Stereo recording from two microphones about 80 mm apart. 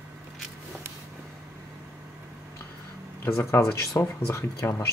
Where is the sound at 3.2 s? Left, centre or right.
Left.